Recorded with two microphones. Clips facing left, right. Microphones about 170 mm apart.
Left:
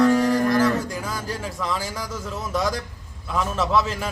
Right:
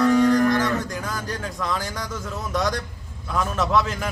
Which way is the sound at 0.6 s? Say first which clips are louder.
Left 3 dB; 5° left (ahead or behind).